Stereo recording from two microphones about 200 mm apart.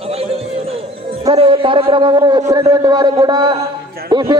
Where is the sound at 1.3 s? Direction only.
25° right (ahead or behind).